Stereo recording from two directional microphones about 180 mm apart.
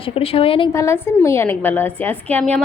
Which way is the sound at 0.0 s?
30° left (ahead or behind).